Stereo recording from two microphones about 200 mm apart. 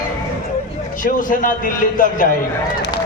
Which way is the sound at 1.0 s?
45° left (ahead or behind).